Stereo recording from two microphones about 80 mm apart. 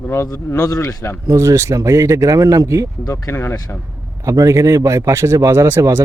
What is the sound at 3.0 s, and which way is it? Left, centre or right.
Speech, left.